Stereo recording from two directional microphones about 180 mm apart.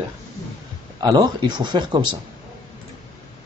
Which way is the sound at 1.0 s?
25° right (ahead or behind).